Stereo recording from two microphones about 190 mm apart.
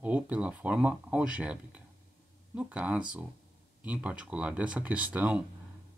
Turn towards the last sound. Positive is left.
turn(degrees=-10)  # may be behind; listen again after turning